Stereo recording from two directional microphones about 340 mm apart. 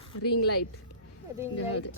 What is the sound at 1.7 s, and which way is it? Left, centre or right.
Speech, left.